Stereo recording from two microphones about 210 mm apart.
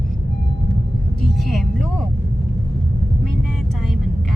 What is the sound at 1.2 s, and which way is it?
Vehicle, centre (ahead or behind).